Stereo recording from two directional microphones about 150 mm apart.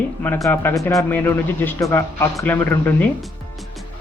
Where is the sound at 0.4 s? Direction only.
20° left (ahead or behind).